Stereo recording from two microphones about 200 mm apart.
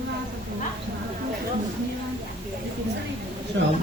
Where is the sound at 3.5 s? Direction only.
60° right (ahead or behind).